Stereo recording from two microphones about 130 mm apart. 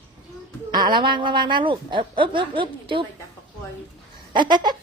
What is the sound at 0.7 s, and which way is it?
A woman's voice, 35° right (ahead or behind).